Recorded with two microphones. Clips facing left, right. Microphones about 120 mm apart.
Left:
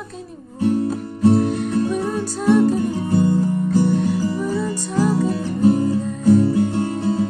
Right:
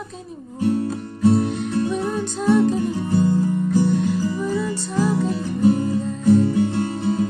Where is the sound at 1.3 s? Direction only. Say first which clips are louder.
Left 2 dB; 5° left (ahead or behind).